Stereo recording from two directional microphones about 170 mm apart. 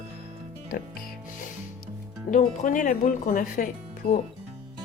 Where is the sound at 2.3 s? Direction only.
50° left (ahead or behind).